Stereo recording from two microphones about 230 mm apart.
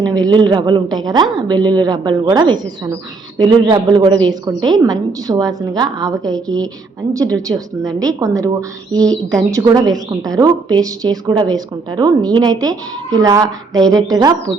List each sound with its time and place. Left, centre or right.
0.0 s a woman's voice: centre